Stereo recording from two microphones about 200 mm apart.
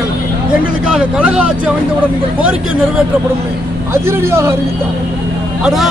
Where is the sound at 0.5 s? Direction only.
5° right (ahead or behind).